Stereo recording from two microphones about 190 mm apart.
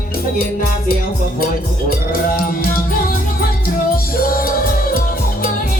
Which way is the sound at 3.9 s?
50° left (ahead or behind).